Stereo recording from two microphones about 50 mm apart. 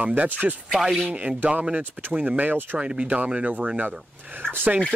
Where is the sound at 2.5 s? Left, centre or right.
Right.